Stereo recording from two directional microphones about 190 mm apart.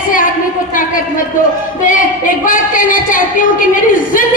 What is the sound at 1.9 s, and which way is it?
A woman's voice, 45° left (ahead or behind).